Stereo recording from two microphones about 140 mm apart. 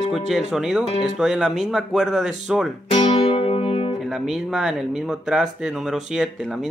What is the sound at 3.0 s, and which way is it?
Music, 45° left (ahead or behind).